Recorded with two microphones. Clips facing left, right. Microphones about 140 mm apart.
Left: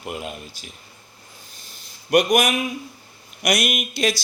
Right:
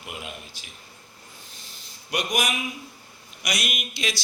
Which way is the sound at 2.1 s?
55° left (ahead or behind).